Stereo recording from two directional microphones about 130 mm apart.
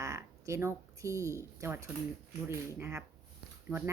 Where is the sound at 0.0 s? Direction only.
20° right (ahead or behind).